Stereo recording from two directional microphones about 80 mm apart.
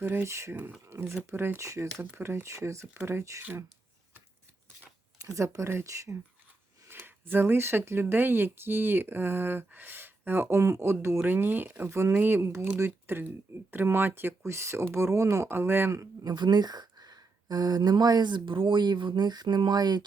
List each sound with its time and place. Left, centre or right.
0.0 s speech: right
2.8 s speech: right
5.2 s speech: right
6.8 s speech: right
16.2 s speech: right